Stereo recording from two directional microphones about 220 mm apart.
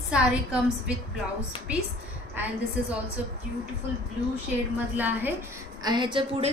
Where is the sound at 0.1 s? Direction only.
5° right (ahead or behind).